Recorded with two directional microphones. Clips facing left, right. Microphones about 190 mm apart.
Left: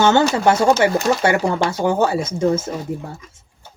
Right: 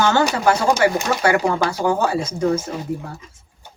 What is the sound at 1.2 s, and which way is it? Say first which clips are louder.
Speech: even; 25° left (ahead or behind).